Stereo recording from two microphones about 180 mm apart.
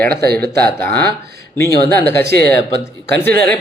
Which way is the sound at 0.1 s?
60° right (ahead or behind).